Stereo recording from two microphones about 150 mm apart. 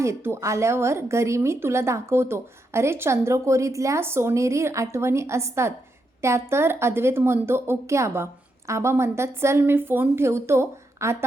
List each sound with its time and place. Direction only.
0.0 s a woman's voice: 15° right (ahead or behind)